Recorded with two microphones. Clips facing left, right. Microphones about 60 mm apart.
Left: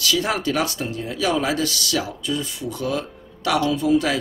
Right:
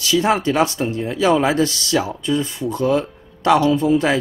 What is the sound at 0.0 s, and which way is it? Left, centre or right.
Speech, right.